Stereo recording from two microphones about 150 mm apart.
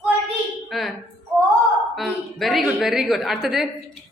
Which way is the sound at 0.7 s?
Centre (ahead or behind).